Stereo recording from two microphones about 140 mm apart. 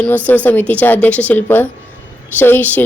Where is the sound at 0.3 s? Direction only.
10° left (ahead or behind).